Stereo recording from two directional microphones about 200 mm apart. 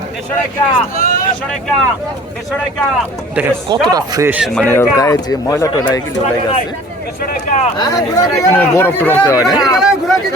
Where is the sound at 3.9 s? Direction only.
15° right (ahead or behind); by 5.8 s 15° left (ahead or behind).